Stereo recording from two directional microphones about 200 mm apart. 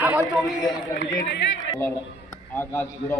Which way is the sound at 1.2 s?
65° left (ahead or behind).